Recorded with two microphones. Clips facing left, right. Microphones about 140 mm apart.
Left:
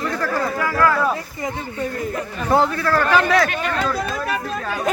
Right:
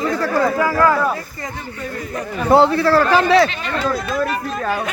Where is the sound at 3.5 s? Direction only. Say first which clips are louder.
Left 1 dB; 50° left (ahead or behind).